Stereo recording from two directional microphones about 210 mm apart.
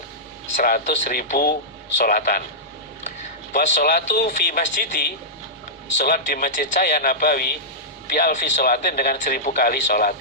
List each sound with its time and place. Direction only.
0.5 s speech: 40° left (ahead or behind)
3.5 s a man's voice: 40° left (ahead or behind)